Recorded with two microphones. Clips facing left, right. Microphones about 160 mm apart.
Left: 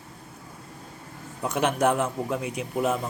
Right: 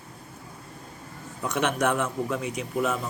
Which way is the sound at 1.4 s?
30° left (ahead or behind).